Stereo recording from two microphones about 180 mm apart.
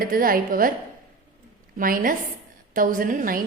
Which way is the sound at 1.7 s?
50° right (ahead or behind).